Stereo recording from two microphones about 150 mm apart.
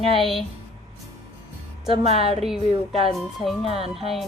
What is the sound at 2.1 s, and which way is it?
Speech, 40° right (ahead or behind).